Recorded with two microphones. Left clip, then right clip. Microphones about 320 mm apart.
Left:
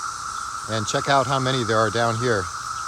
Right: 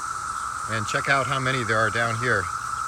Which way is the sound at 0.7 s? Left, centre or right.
Centre.